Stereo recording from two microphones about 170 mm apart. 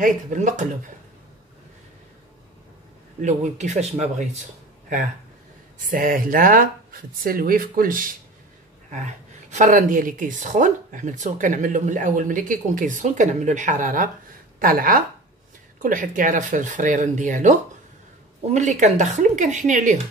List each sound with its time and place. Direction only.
0.0 s speech: 45° right (ahead or behind)
3.2 s speech: 45° right (ahead or behind)
5.8 s speech: 50° right (ahead or behind)
9.5 s speech: 45° right (ahead or behind)